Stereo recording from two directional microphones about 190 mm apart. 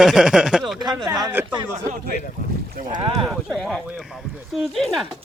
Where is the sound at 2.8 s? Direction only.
25° right (ahead or behind).